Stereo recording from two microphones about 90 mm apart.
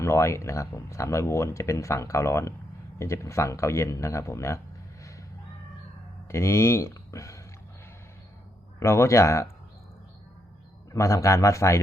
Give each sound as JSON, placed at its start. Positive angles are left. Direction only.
{"t": 0.0, "sound": "speech", "side_deg": 30}
{"t": 6.2, "sound": "speech", "side_deg": 30}
{"t": 8.8, "sound": "speech", "side_deg": 30}
{"t": 10.9, "sound": "speech", "side_deg": 35}